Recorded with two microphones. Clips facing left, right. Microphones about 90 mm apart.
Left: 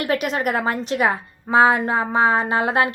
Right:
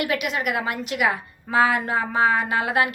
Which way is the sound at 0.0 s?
40° left (ahead or behind).